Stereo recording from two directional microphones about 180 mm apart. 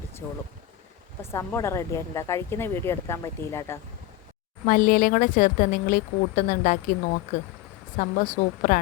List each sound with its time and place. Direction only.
1.2 s speech: 15° left (ahead or behind)
4.6 s speech: 50° left (ahead or behind)
7.9 s speech: 45° left (ahead or behind)